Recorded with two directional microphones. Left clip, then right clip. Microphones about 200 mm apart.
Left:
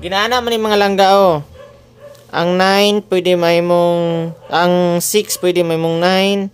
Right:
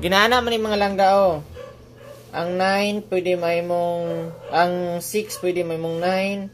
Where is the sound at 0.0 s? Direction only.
5° right (ahead or behind).